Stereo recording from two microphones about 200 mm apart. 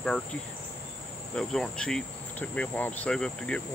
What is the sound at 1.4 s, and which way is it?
Cricket, 5° left (ahead or behind).